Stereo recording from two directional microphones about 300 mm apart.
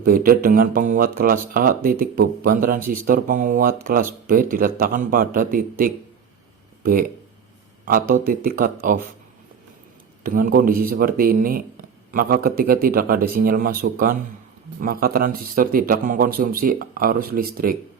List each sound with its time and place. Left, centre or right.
0.0 s speech: right
7.9 s speech: right
10.2 s speech: right